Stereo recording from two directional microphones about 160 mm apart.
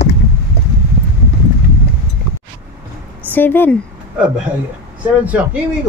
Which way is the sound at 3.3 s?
15° left (ahead or behind).